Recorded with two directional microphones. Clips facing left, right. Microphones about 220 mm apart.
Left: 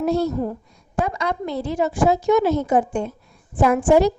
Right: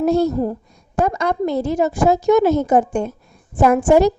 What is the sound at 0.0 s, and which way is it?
A woman's voice, 45° right (ahead or behind).